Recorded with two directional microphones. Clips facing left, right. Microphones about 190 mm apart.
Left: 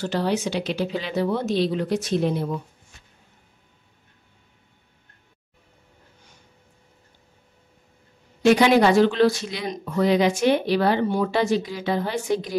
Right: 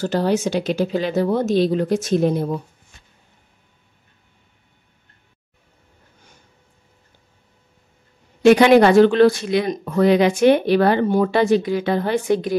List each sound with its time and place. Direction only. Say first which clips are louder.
0.0 s speech: right 4 dB; 45° right (ahead or behind)
8.5 s speech: right 5 dB; 60° right (ahead or behind)